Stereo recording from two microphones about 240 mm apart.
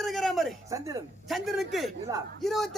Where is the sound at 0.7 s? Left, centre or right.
Centre.